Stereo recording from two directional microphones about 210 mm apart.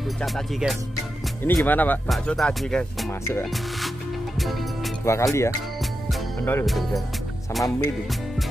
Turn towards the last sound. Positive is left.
turn(degrees=0)  # may be behind; listen again after turning